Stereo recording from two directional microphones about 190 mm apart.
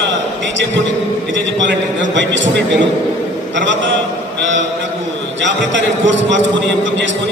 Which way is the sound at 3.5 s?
70° right (ahead or behind).